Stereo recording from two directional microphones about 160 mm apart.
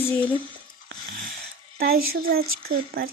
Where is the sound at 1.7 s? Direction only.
70° right (ahead or behind).